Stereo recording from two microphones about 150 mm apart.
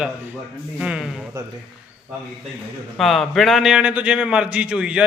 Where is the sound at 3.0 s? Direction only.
Centre (ahead or behind).